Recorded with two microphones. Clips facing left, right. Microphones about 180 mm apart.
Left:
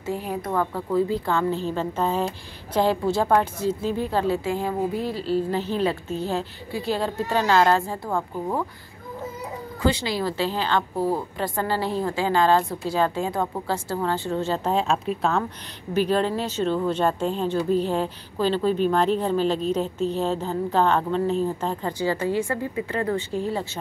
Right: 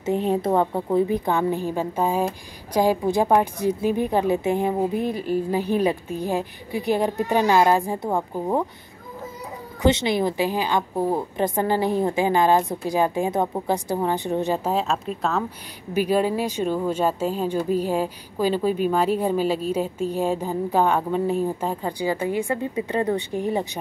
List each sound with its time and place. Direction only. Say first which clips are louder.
0.0 s a woman's voice: right 6 dB; 25° right (ahead or behind)
9.8 s speech: right 4 dB; 20° right (ahead or behind)